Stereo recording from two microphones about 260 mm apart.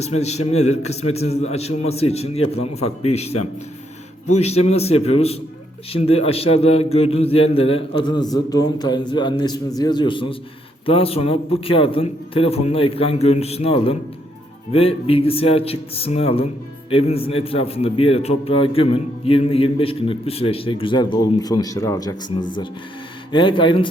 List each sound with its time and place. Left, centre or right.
0.0 s a man's voice: left